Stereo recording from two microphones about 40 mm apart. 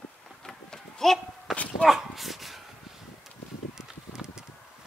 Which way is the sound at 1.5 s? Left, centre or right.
Centre.